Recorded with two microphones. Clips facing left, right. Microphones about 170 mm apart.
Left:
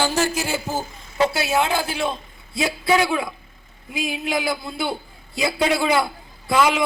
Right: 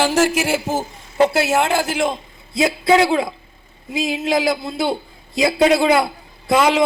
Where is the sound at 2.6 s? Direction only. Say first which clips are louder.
Right 5 dB; 20° right (ahead or behind).